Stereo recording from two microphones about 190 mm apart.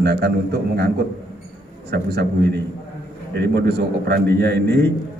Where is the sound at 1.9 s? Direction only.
60° right (ahead or behind).